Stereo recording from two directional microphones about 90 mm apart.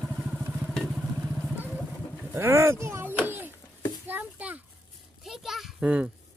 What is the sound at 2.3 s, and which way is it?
Speech, 30° right (ahead or behind).